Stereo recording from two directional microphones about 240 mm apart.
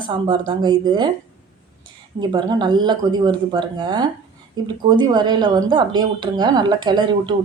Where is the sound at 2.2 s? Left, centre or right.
Centre.